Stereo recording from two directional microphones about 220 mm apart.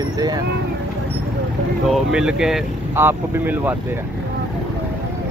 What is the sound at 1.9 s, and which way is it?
Speech, 5° right (ahead or behind).